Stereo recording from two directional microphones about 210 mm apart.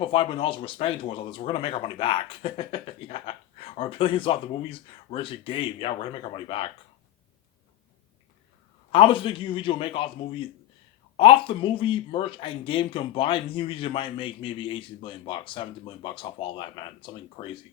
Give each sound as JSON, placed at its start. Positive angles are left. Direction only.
{"t": 0.0, "sound": "speech", "side_deg": 25}
{"t": 8.9, "sound": "speech", "side_deg": 25}